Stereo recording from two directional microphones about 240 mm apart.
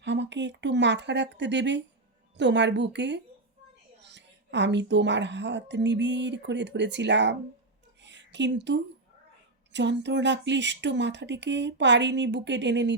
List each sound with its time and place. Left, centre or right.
0.0 s a woman's voice: right
8.0 s a sound: right
9.7 s a woman's voice: right